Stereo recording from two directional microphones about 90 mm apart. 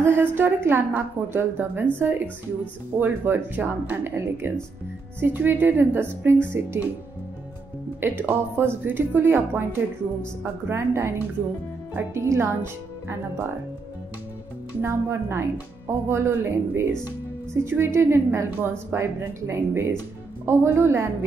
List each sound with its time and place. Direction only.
0.0 s a woman's voice: 25° right (ahead or behind)
8.0 s a woman's voice: 20° right (ahead or behind)
14.8 s a woman's voice: 30° right (ahead or behind)